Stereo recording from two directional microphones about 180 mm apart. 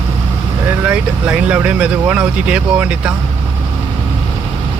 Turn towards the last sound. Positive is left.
turn(degrees=-5)  # may be behind; listen again after turning